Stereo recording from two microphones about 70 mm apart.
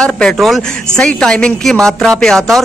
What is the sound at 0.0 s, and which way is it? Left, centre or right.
A man's voice, centre.